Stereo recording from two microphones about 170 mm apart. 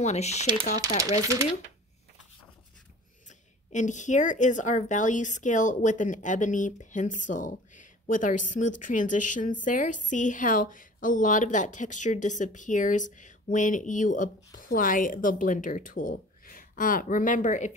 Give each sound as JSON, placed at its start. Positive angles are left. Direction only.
{"t": 0.0, "sound": "speech", "side_deg": 40}
{"t": 3.3, "sound": "speech", "side_deg": 45}